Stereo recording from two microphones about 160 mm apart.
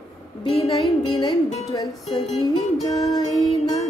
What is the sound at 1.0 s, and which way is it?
Speech, 30° left (ahead or behind).